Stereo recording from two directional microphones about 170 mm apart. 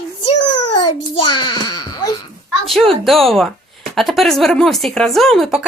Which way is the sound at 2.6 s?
Centre (ahead or behind).